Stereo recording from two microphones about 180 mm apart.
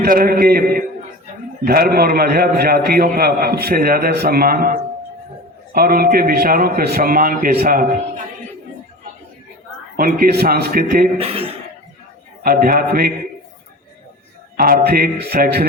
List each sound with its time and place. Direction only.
0.0 s a man's voice: 55° right (ahead or behind)
5.7 s a man's voice: 55° right (ahead or behind)
10.0 s a man's voice: 55° right (ahead or behind)
12.4 s a man's voice: 55° right (ahead or behind)
14.5 s a man's voice: 55° right (ahead or behind)